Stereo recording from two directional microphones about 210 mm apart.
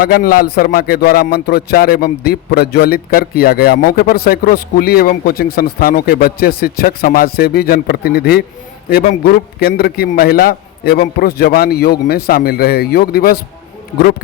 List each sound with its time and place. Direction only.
0.0 s speech: 45° left (ahead or behind)